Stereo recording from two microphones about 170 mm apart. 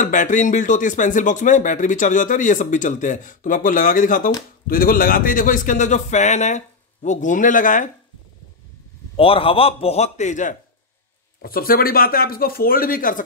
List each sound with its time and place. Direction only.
0.0 s speech: 50° left (ahead or behind)
9.1 s a man's voice: 35° left (ahead or behind)
11.4 s speech: 60° left (ahead or behind)